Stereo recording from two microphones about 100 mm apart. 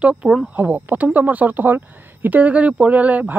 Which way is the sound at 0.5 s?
20° right (ahead or behind).